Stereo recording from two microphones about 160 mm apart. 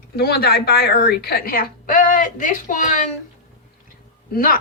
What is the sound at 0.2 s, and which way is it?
A woman's voice, 75° left (ahead or behind).